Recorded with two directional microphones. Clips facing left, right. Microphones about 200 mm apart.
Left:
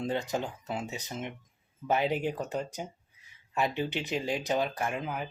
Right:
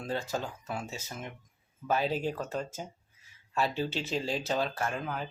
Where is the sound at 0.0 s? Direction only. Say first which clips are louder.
Left 3 dB; 20° left (ahead or behind).